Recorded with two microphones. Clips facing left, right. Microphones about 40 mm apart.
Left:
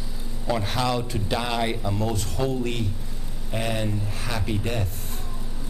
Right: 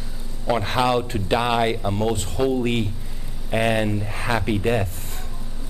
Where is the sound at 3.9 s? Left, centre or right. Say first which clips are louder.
Right 6 dB; right.